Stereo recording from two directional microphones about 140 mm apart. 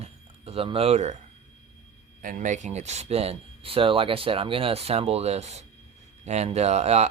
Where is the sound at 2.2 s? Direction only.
70° right (ahead or behind).